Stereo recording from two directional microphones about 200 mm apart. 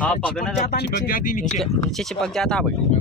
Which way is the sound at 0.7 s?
50° left (ahead or behind).